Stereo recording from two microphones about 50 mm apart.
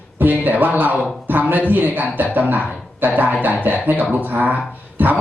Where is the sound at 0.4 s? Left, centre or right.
Right.